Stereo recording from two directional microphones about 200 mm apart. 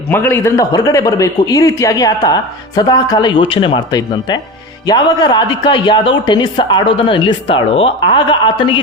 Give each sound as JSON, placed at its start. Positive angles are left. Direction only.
{"t": 0.1, "sound": "a man's voice", "side_deg": 10}